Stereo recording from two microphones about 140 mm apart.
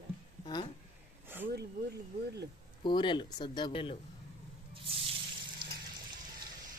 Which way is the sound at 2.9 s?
35° left (ahead or behind).